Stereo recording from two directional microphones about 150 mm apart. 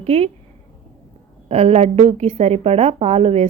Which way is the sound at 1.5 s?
45° right (ahead or behind).